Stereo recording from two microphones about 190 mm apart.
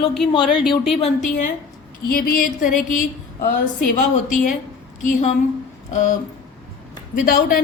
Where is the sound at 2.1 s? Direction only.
50° left (ahead or behind).